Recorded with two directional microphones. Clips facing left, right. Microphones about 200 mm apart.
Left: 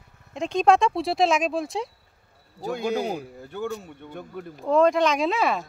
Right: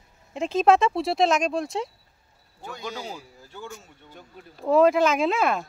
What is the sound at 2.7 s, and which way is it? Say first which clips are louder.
Speech: left 9 dB; 55° left (ahead or behind).